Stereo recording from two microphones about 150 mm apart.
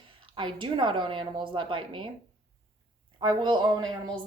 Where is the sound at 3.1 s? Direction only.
30° right (ahead or behind).